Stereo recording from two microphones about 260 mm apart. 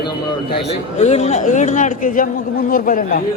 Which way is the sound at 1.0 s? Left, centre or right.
Left.